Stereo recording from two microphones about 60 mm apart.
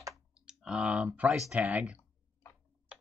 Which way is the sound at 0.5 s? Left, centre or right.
Centre.